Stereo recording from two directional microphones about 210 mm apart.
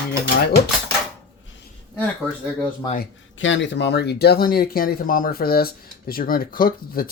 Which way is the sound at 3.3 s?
65° left (ahead or behind).